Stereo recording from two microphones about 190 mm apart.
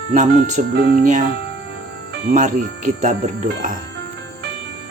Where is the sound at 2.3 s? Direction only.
40° right (ahead or behind).